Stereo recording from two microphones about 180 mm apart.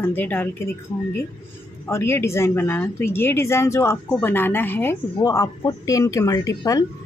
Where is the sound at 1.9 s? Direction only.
15° left (ahead or behind).